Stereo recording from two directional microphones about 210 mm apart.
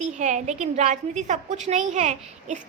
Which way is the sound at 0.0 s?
35° right (ahead or behind).